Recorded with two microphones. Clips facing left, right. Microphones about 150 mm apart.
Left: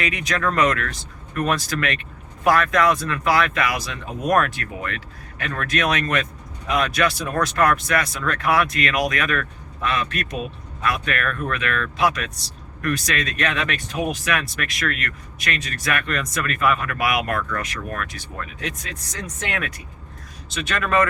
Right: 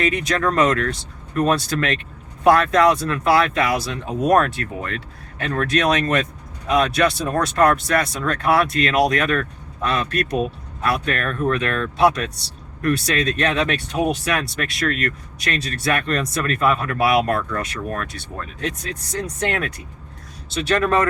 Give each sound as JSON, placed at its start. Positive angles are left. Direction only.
{"t": 0.0, "sound": "speech", "side_deg": -30}